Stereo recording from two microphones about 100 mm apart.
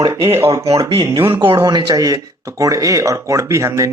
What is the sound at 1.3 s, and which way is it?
Speech, 55° right (ahead or behind).